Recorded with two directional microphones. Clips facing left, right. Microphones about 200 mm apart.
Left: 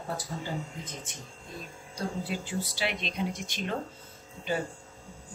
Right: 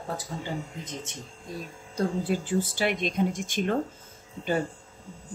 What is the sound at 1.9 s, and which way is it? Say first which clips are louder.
Speech: right 7 dB; 50° right (ahead or behind).